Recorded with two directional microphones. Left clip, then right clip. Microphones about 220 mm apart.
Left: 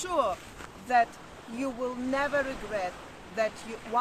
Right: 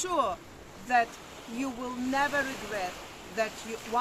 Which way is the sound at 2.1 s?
5° left (ahead or behind).